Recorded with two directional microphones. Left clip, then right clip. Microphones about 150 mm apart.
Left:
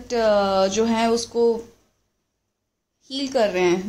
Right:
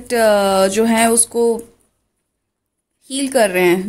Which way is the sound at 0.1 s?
40° right (ahead or behind).